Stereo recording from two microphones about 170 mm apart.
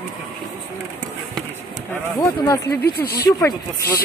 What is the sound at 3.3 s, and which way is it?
Speech, 20° left (ahead or behind).